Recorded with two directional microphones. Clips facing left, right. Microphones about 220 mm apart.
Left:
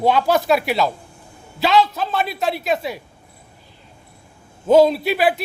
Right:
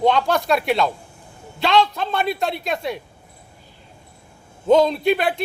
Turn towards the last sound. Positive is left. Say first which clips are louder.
# even
turn(degrees=5)  # may be behind; listen again after turning